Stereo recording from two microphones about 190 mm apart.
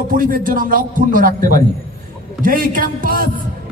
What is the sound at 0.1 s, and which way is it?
Speech, 45° right (ahead or behind).